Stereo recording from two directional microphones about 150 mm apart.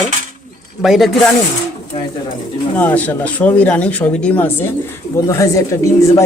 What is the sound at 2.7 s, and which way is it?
Speech, 10° left (ahead or behind).